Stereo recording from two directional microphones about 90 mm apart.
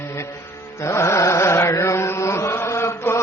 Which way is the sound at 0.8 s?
35° left (ahead or behind).